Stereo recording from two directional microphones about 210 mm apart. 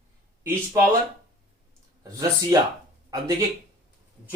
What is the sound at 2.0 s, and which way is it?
Speech, 15° right (ahead or behind).